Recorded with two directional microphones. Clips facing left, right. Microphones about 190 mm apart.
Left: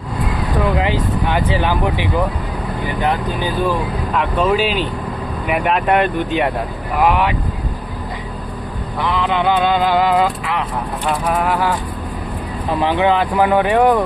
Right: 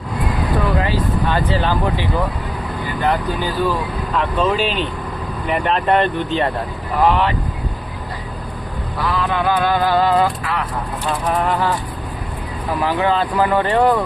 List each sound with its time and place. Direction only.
0.8 s speech: 15° left (ahead or behind)
4.4 s speech: 10° left (ahead or behind)
9.0 s speech: 20° left (ahead or behind)
11.3 s speech: 5° left (ahead or behind)
12.8 s speech: 20° left (ahead or behind)